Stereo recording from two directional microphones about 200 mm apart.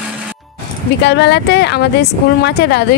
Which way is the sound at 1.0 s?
55° left (ahead or behind).